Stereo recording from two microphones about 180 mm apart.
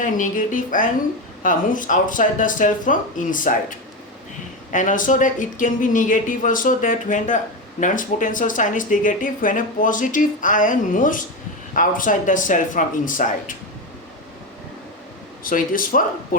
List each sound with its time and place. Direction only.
0.0 s speech: 45° left (ahead or behind)
15.4 s speech: 50° left (ahead or behind)